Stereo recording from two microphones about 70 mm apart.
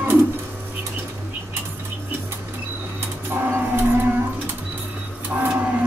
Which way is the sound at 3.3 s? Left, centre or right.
Right.